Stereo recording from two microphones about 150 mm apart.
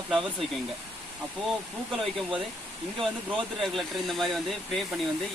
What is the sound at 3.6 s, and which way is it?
Speech, centre (ahead or behind).